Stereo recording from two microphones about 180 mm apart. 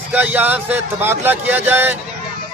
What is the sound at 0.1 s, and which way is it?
A man's voice, 10° right (ahead or behind).